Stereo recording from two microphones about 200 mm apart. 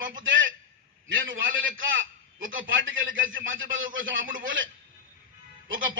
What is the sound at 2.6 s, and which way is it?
Speech, 75° right (ahead or behind).